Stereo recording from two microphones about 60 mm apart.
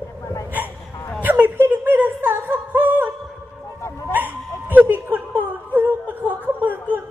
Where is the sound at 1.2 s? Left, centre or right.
Right.